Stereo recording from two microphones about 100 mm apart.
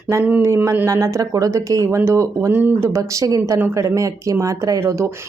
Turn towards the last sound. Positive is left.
turn(degrees=-30)  # may be behind; listen again after turning